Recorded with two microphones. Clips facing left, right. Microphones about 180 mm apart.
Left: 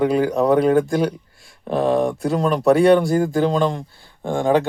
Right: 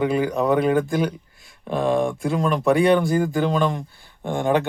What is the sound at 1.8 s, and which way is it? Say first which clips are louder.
Speech: left 2 dB; 40° left (ahead or behind).